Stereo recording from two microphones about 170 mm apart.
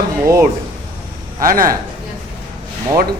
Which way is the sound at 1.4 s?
55° right (ahead or behind).